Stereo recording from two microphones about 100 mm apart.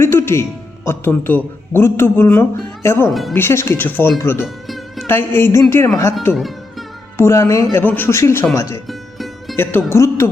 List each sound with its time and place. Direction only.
0.0 s a man's voice: 25° left (ahead or behind)
3.1 s speech: centre (ahead or behind)
3.3 s speech: 25° left (ahead or behind)
4.4 s music: centre (ahead or behind)
5.0 s speech: 25° left (ahead or behind)
6.3 s music: centre (ahead or behind)
7.2 s speech: 30° left (ahead or behind)
8.9 s music: centre (ahead or behind)
9.9 s a man's voice: 25° left (ahead or behind)